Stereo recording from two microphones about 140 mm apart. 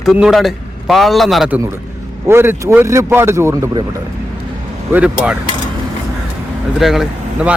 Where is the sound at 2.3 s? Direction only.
15° right (ahead or behind).